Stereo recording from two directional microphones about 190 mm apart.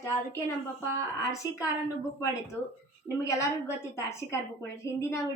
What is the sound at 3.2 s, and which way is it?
A woman's voice, 15° left (ahead or behind).